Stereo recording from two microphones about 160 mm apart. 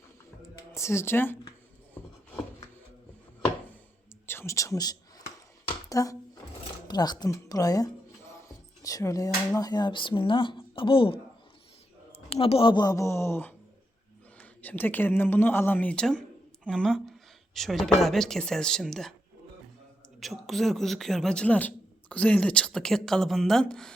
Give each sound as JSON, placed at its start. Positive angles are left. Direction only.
{"t": 0.7, "sound": "speech", "side_deg": 15}
{"t": 4.3, "sound": "whispering", "side_deg": 15}
{"t": 5.9, "sound": "speech", "side_deg": 20}
{"t": 8.4, "sound": "a sound", "side_deg": 20}
{"t": 9.6, "sound": "speech", "side_deg": 25}
{"t": 12.3, "sound": "speech", "side_deg": 35}
{"t": 20.1, "sound": "a man's voice", "side_deg": 0}